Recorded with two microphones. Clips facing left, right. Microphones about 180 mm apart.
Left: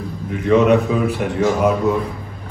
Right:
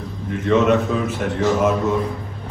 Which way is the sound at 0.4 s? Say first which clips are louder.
Left 3 dB; centre (ahead or behind).